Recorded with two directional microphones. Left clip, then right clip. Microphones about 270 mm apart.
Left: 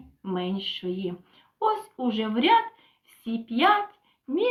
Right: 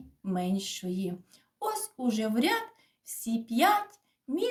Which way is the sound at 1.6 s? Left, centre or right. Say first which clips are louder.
Left 7 dB; right.